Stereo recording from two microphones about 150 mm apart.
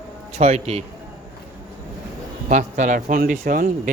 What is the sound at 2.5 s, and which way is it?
Speech, 55° right (ahead or behind).